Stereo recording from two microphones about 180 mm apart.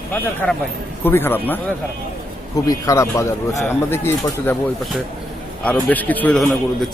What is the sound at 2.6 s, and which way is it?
A man's voice, 15° left (ahead or behind).